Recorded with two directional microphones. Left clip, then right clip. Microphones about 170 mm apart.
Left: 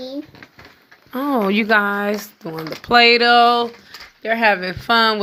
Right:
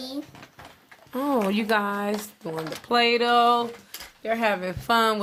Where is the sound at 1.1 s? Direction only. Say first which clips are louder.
Left 4 dB; 15° left (ahead or behind).